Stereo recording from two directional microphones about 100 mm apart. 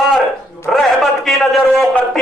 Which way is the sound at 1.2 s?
Centre (ahead or behind).